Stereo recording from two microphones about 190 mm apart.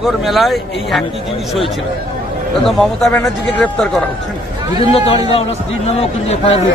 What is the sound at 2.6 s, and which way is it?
Speech, centre (ahead or behind).